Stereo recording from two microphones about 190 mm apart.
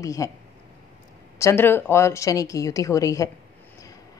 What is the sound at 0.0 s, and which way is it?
Speech, 15° left (ahead or behind).